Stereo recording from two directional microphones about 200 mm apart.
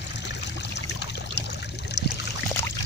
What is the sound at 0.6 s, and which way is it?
Trickle, 60° left (ahead or behind).